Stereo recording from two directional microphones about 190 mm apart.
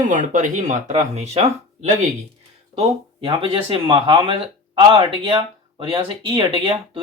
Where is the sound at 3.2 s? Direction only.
30° right (ahead or behind).